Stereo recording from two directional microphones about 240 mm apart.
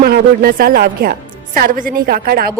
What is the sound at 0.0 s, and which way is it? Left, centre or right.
A woman's voice, right.